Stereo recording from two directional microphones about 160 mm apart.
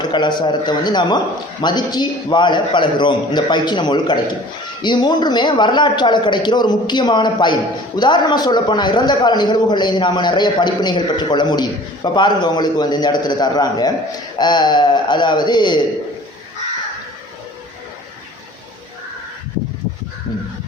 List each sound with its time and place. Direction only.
0.0 s a man's voice: 30° left (ahead or behind)